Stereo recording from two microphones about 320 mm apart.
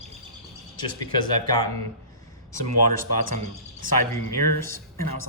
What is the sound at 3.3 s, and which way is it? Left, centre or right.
Speech, right.